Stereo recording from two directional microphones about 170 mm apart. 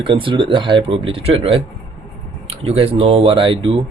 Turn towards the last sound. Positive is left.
turn(degrees=-30)  # may be behind; listen again after turning